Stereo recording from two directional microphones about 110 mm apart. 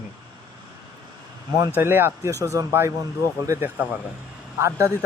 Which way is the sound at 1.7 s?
20° right (ahead or behind).